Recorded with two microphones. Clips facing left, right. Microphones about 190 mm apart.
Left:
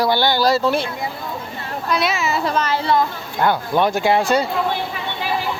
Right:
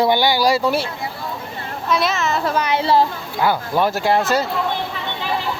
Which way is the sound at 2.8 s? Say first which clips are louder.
Right 3 dB; 30° right (ahead or behind).